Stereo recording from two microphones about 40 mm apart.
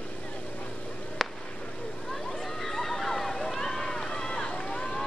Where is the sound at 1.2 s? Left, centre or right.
Centre.